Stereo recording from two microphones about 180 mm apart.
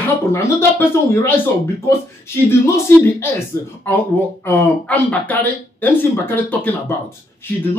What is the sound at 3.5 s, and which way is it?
Speech, 15° left (ahead or behind).